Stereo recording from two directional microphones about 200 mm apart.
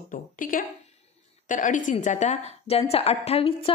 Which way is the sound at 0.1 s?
45° left (ahead or behind).